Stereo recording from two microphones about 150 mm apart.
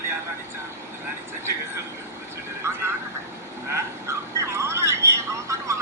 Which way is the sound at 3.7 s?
20° right (ahead or behind).